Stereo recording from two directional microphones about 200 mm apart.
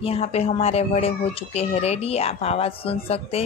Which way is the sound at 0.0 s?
30° left (ahead or behind).